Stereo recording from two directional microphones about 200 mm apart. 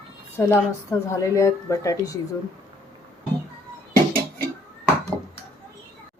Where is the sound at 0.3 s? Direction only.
10° left (ahead or behind).